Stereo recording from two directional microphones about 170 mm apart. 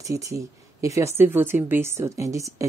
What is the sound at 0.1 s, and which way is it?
Speech, 20° right (ahead or behind).